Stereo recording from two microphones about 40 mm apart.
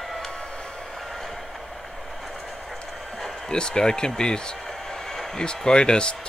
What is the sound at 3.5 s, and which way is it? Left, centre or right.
Speech, centre.